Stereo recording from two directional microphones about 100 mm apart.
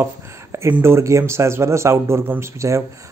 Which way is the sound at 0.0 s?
25° right (ahead or behind).